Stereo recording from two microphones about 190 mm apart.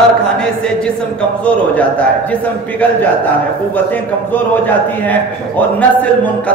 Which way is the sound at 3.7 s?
10° left (ahead or behind).